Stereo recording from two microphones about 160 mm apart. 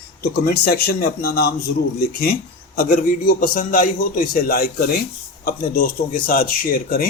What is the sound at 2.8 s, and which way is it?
Speech, 60° left (ahead or behind).